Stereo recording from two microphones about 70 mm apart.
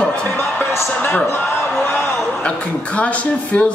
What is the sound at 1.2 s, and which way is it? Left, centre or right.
Speech, left.